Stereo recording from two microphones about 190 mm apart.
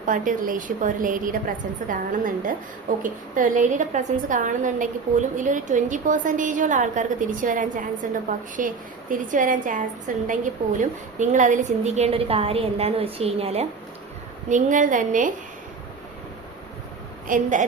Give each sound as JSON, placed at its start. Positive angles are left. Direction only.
{"t": 0.0, "sound": "a woman's voice", "side_deg": -45}
{"t": 14.5, "sound": "a woman's voice", "side_deg": -45}
{"t": 17.2, "sound": "a woman's voice", "side_deg": -40}